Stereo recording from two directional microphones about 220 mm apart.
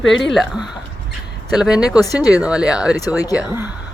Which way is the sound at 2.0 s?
15° left (ahead or behind).